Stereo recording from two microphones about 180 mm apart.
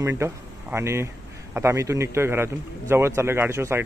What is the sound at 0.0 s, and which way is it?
A woman's voice, 15° right (ahead or behind).